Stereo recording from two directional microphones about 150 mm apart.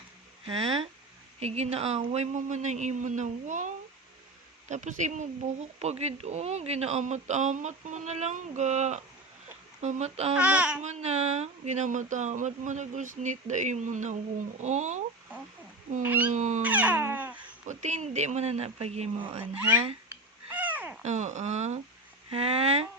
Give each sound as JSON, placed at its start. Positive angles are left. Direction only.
{"t": 1.4, "sound": "speech", "side_deg": -45}
{"t": 4.7, "sound": "speech", "side_deg": -55}
{"t": 10.3, "sound": "music", "side_deg": -10}
{"t": 10.8, "sound": "speech", "side_deg": -45}
{"t": 16.3, "sound": "a sound", "side_deg": -55}
{"t": 16.6, "sound": "music", "side_deg": -10}
{"t": 17.7, "sound": "speech", "side_deg": -50}
{"t": 20.5, "sound": "a sound", "side_deg": -10}
{"t": 21.0, "sound": "speech", "side_deg": -50}